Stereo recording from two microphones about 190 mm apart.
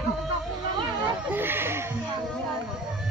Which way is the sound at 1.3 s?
10° right (ahead or behind).